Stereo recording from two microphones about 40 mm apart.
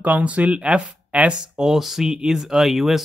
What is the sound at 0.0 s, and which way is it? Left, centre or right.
Speech, right.